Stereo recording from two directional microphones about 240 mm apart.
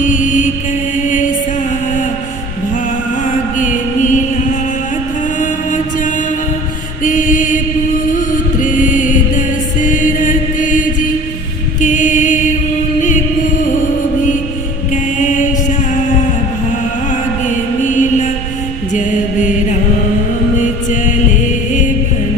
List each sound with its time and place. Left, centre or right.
0.0 s mantra: left
3.6 s mantra: left
5.4 s music: left
7.0 s mantra: left
8.5 s music: left
9.8 s mantra: left
13.0 s music: left
15.2 s mantra: left
17.1 s music: left
20.6 s music: left